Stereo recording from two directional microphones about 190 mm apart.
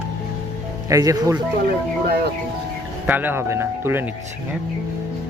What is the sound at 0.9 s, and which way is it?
Speech, 15° right (ahead or behind).